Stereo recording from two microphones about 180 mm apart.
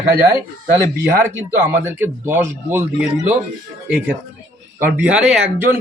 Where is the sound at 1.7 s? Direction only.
10° right (ahead or behind).